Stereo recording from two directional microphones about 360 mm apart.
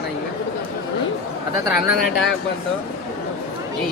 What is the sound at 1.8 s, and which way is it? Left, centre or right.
Speech, centre.